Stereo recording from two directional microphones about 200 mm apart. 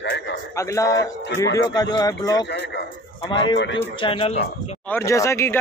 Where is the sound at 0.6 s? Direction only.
15° left (ahead or behind).